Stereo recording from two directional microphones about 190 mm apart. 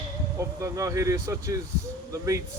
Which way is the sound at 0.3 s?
15° right (ahead or behind).